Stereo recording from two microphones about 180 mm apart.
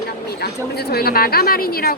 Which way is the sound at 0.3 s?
60° left (ahead or behind).